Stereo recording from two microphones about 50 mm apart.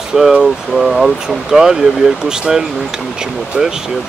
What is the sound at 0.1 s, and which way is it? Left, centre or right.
Speech, centre.